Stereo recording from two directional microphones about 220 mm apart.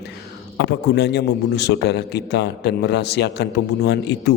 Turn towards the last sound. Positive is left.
turn(degrees=50)  # may be behind; listen again after turning